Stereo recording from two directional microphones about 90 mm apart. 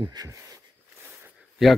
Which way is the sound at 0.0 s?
45° right (ahead or behind).